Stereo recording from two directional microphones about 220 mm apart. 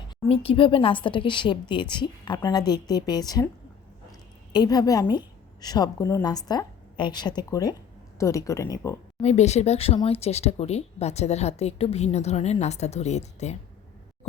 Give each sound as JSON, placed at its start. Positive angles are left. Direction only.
{"t": 0.3, "sound": "speech", "side_deg": 25}
{"t": 4.5, "sound": "a woman's voice", "side_deg": 20}
{"t": 9.2, "sound": "speech", "side_deg": 30}